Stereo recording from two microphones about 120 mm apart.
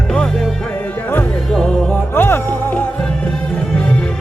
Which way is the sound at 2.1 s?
20° left (ahead or behind).